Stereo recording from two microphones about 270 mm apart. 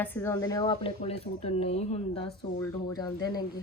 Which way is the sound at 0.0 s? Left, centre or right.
Centre.